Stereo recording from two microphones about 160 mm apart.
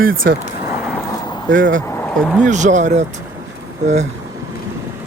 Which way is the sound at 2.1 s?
Centre (ahead or behind).